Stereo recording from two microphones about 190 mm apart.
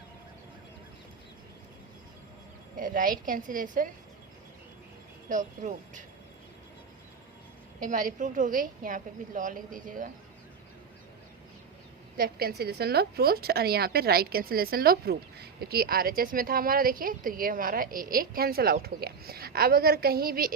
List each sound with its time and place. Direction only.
2.7 s a woman's voice: 45° right (ahead or behind)
5.3 s speech: 40° right (ahead or behind)
7.8 s a woman's voice: 45° right (ahead or behind)
12.1 s a woman's voice: 50° right (ahead or behind)